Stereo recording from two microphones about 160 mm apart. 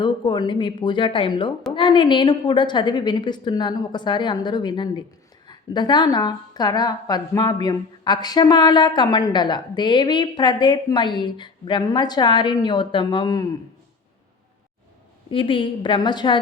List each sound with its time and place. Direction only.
0.0 s a woman's voice: 30° left (ahead or behind)
15.3 s a woman's voice: 35° left (ahead or behind)